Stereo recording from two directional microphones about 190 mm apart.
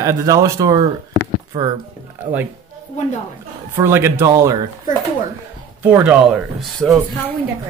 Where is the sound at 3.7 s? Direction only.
15° right (ahead or behind).